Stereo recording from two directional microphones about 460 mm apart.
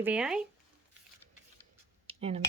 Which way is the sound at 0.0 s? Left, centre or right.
Centre.